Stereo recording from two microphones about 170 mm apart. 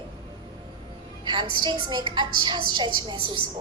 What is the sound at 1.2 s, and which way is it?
A woman's voice, 25° right (ahead or behind).